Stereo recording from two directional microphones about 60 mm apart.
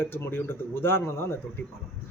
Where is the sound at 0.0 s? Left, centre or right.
Left.